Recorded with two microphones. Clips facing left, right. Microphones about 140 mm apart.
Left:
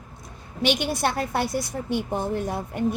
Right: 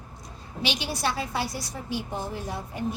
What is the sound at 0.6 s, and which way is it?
A woman's voice, 55° left (ahead or behind).